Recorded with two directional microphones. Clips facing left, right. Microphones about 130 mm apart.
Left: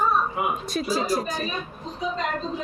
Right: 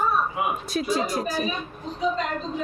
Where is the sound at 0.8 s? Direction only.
Centre (ahead or behind).